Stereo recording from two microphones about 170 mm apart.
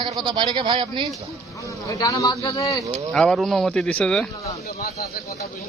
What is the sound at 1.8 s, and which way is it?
Speech, 20° left (ahead or behind).